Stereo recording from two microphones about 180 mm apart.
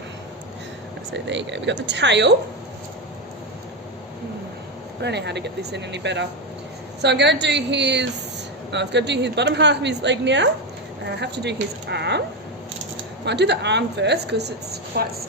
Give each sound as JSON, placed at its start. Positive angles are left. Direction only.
{"t": 1.1, "sound": "speech", "side_deg": -85}
{"t": 5.0, "sound": "a woman's voice", "side_deg": -70}
{"t": 13.2, "sound": "a woman's voice", "side_deg": -70}